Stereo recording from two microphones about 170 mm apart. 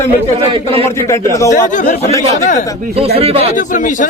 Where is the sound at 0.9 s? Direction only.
15° left (ahead or behind).